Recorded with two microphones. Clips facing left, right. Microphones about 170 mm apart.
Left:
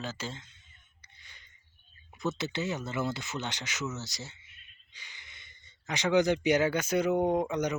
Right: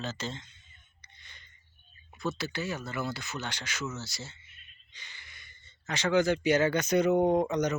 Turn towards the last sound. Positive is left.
turn(degrees=10)  # may be behind; listen again after turning